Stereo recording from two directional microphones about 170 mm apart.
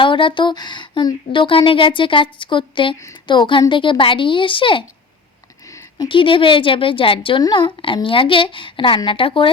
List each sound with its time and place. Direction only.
0.0 s a woman's voice: 30° left (ahead or behind)
5.6 s a sound: 20° left (ahead or behind)
6.1 s a woman's voice: 30° left (ahead or behind)